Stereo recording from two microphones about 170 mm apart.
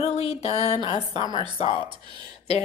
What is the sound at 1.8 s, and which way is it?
Speech, 25° right (ahead or behind).